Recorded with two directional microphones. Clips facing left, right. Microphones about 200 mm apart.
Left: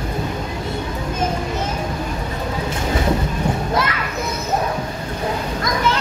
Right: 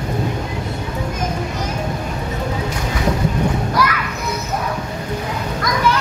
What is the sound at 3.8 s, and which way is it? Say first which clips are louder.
Children playing: right 4 dB; 25° left (ahead or behind).